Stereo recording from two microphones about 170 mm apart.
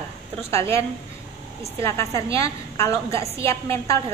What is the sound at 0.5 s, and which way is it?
A woman's voice, 15° left (ahead or behind).